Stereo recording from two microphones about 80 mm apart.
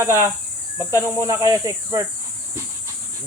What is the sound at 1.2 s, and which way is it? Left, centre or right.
Speech, right.